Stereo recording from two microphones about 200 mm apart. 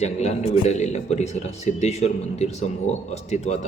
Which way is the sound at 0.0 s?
35° left (ahead or behind).